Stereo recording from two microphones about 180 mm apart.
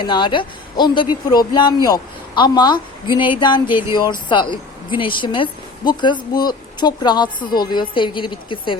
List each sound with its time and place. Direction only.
0.0 s speech: 25° left (ahead or behind)